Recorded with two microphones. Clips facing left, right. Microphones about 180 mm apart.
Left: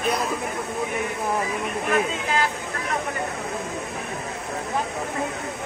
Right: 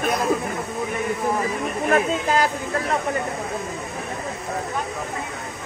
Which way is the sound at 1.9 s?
40° right (ahead or behind).